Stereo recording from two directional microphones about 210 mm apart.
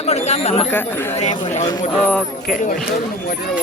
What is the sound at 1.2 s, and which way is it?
Speech, 35° left (ahead or behind).